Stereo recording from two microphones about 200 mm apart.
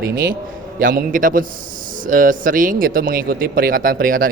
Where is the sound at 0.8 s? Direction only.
45° right (ahead or behind).